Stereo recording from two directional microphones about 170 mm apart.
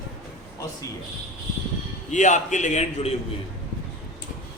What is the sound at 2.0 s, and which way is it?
A man's voice, 45° left (ahead or behind).